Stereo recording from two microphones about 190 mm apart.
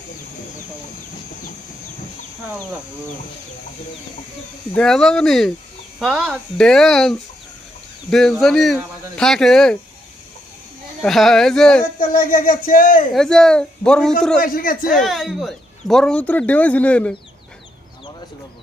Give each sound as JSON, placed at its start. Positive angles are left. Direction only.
{"t": 4.7, "sound": "speech", "side_deg": 5}
{"t": 11.0, "sound": "speech", "side_deg": 0}
{"t": 11.9, "sound": "speech", "side_deg": 45}
{"t": 13.1, "sound": "speech", "side_deg": 5}
{"t": 14.3, "sound": "speech", "side_deg": 50}
{"t": 14.8, "sound": "speech", "side_deg": 0}